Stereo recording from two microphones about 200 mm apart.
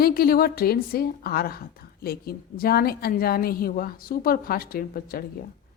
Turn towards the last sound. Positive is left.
turn(degrees=45)  # may be behind; listen again after turning